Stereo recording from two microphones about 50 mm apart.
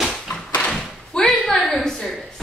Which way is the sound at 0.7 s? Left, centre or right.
Centre.